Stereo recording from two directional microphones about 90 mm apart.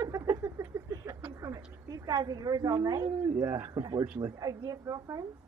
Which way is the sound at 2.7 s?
45° right (ahead or behind).